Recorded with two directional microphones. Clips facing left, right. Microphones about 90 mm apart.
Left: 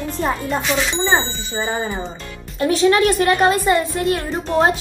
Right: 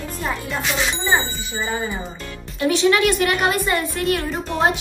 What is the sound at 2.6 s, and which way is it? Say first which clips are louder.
A woman's voice: left 2 dB; 35° left (ahead or behind).